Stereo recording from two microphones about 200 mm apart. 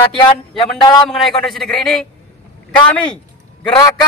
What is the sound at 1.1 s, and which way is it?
Speech, centre (ahead or behind).